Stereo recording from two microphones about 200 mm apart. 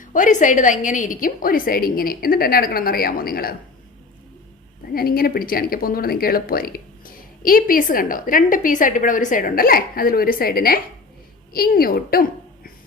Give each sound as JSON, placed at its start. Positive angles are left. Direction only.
{"t": 0.0, "sound": "speech", "side_deg": 40}
{"t": 4.9, "sound": "a woman's voice", "side_deg": 45}